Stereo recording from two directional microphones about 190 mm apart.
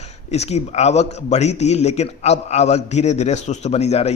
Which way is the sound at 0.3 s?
35° left (ahead or behind).